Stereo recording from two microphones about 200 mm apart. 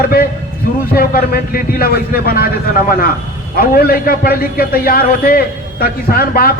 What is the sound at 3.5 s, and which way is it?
A man's voice, 45° left (ahead or behind).